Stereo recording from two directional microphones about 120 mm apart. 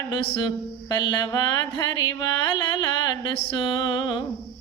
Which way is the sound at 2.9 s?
40° left (ahead or behind).